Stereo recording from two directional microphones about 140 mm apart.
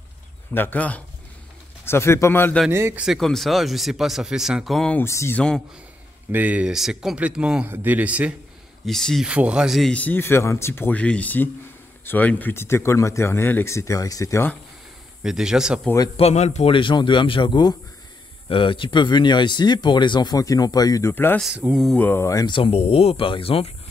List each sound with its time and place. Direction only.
0.6 s speech: 10° left (ahead or behind)
2.7 s speech: 20° right (ahead or behind)
3.0 s speech: centre (ahead or behind)
4.9 s speech: 20° left (ahead or behind)
6.3 s speech: 10° right (ahead or behind)
8.8 s speech: centre (ahead or behind); by 14.5 s 20° left (ahead or behind)
15.2 s speech: 5° right (ahead or behind)
16.2 s speech: 50° left (ahead or behind)
16.7 s speech: 35° left (ahead or behind); by 21.4 s 15° left (ahead or behind)
21.4 s speech: 10° right (ahead or behind)
21.9 s speech: 15° left (ahead or behind)
22.5 s speech: 45° left (ahead or behind)